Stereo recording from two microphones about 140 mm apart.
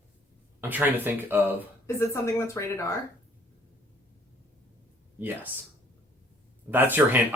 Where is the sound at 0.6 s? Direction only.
15° right (ahead or behind).